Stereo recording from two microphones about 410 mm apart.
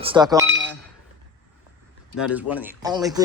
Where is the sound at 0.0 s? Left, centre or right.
Centre.